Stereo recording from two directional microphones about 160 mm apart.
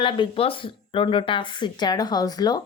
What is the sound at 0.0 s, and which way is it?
Speech, 30° left (ahead or behind).